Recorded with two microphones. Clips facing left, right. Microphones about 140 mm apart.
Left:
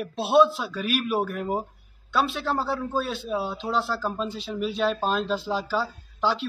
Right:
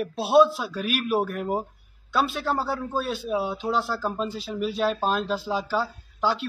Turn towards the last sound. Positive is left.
turn(degrees=0)  # may be behind; listen again after turning